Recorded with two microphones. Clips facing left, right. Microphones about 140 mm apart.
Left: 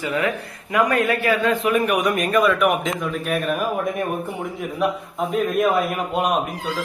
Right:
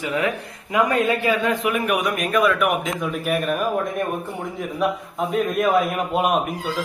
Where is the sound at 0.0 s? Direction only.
20° right (ahead or behind).